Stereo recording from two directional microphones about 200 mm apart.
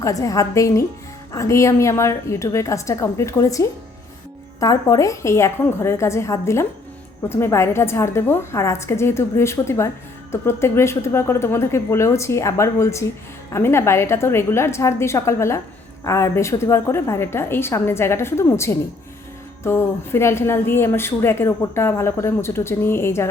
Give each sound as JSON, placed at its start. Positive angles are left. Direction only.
{"t": 0.0, "sound": "speech", "side_deg": 15}